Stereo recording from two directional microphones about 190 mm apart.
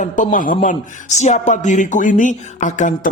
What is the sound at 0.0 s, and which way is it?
Speech, 45° left (ahead or behind).